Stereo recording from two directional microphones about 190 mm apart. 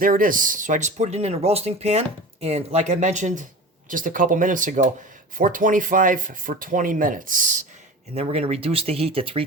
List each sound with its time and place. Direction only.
0.0 s speech: 45° right (ahead or behind)
8.1 s speech: 35° right (ahead or behind)